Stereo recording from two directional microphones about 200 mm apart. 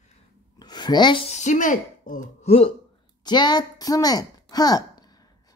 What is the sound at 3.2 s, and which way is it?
Speech, 20° left (ahead or behind).